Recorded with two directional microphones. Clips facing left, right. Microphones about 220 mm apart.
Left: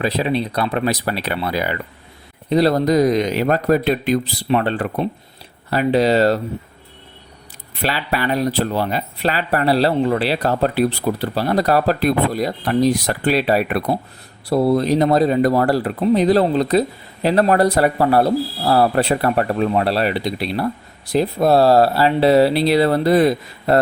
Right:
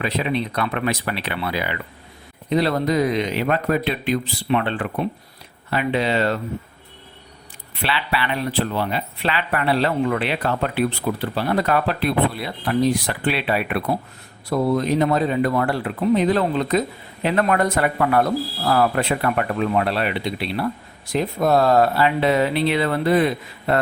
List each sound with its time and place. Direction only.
0.0 s speech: 35° left (ahead or behind)
7.8 s speech: 40° left (ahead or behind)